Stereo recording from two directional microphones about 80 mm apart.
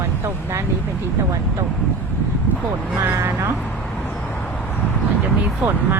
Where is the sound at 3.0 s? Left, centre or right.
Right.